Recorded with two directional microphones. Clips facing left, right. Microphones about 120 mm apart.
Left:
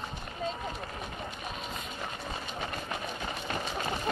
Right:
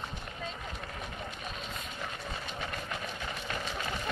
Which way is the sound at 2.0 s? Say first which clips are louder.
Even; 25° left (ahead or behind).